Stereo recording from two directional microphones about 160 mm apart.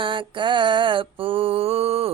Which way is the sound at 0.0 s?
30° right (ahead or behind).